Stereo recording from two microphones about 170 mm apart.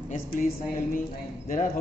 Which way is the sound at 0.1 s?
50° left (ahead or behind).